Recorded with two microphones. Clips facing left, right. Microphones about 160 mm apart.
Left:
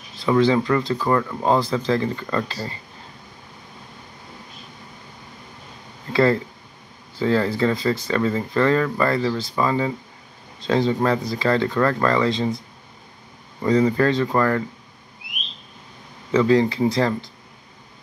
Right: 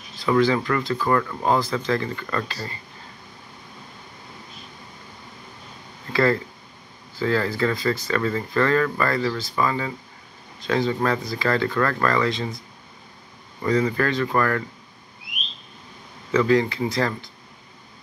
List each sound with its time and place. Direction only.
0.2 s speech: 25° left (ahead or behind)
7.2 s speech: 25° left (ahead or behind)
13.6 s speech: 20° left (ahead or behind)
16.3 s speech: 30° left (ahead or behind)